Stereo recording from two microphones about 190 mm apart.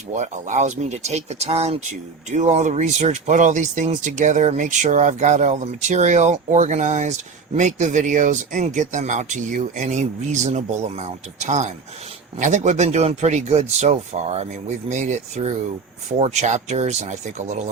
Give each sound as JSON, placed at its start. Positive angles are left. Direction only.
{"t": 0.1, "sound": "speech", "side_deg": -40}